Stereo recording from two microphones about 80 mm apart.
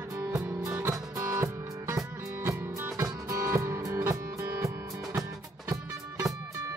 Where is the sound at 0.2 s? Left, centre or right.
Right.